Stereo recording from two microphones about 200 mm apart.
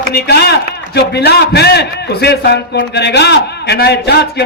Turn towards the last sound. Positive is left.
turn(degrees=55)  # may be behind; listen again after turning